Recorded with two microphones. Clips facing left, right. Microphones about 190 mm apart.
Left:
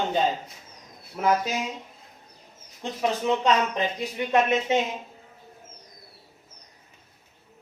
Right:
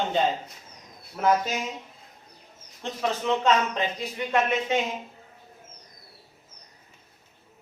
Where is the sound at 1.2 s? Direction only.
10° left (ahead or behind).